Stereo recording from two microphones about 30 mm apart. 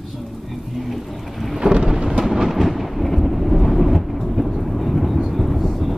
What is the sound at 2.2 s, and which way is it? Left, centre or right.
Thunder, centre.